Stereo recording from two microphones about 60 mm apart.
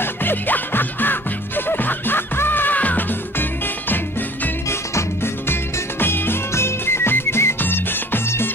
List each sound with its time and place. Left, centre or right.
0.0 s music: left
4.6 s music: left